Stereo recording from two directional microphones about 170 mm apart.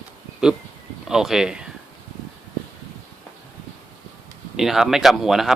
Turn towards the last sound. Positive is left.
turn(degrees=0)  # may be behind; listen again after turning